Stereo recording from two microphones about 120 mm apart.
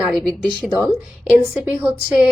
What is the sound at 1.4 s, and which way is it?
Speech, 20° right (ahead or behind).